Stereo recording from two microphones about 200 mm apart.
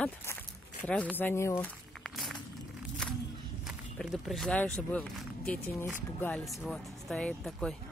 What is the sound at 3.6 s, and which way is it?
Speech, centre (ahead or behind).